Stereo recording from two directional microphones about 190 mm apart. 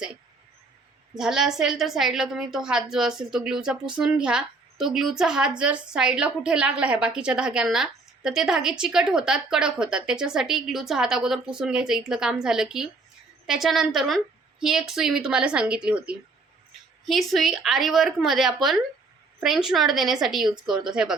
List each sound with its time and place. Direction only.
1.1 s a woman's voice: centre (ahead or behind)